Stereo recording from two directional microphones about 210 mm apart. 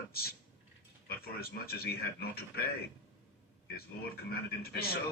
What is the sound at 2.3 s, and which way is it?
Speech, 45° left (ahead or behind).